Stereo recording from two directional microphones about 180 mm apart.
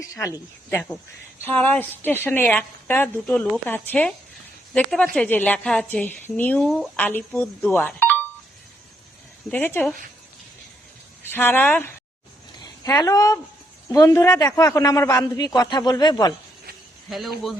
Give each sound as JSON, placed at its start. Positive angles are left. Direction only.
{"t": 0.7, "sound": "a woman's voice", "side_deg": 10}
{"t": 9.5, "sound": "speech", "side_deg": 10}
{"t": 11.3, "sound": "a man's voice", "side_deg": 10}
{"t": 17.1, "sound": "a woman's voice", "side_deg": 0}